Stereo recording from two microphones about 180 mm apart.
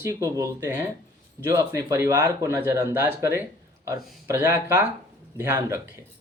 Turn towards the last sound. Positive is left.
turn(degrees=-15)  # may be behind; listen again after turning